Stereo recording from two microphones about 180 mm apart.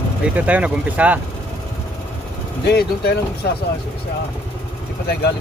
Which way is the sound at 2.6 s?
65° left (ahead or behind).